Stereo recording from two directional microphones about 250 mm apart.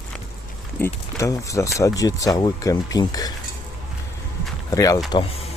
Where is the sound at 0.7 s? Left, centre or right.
Centre.